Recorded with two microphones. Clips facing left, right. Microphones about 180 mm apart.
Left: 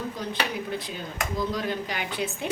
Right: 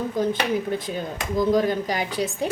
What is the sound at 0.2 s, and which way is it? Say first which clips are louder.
Speech: right 11 dB; 45° right (ahead or behind).